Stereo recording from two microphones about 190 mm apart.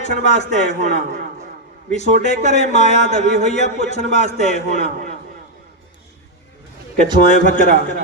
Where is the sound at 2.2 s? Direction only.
40° left (ahead or behind).